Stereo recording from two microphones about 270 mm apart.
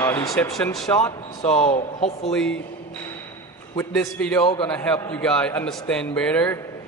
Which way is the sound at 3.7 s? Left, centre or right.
Centre.